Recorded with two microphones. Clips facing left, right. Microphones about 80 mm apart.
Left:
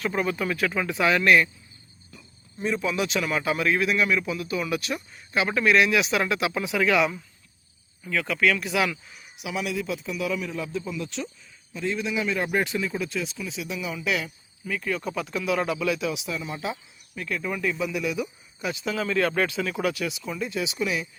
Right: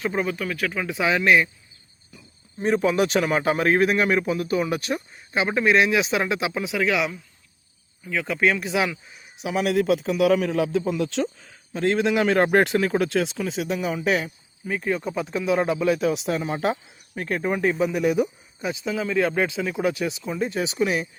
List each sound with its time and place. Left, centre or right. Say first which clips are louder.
0.0 s speech: right 1 dB; centre
0.3 s speech: left 1 dB; centre
0.9 s speech: right 1 dB; centre
2.6 s speech: right 6 dB; right; by 7.1 s centre
8.1 s speech: right 1 dB; right
9.4 s speech: right 5 dB; right
9.6 s speech: right 9 dB; right
14.7 s speech: right 3 dB; right
18.6 s speech: right 2 dB; centre
20.4 s speech: right 5 dB; right